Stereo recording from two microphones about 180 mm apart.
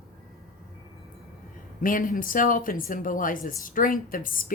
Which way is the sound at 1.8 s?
50° left (ahead or behind).